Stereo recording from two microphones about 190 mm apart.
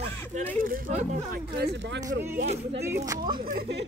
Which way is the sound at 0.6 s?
50° right (ahead or behind).